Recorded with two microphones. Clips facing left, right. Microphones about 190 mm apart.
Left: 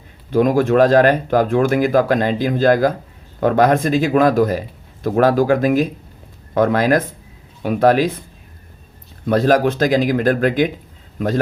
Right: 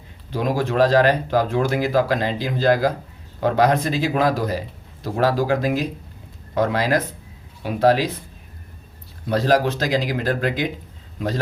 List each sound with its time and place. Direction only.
0.3 s speech: 50° left (ahead or behind)
9.2 s speech: 50° left (ahead or behind)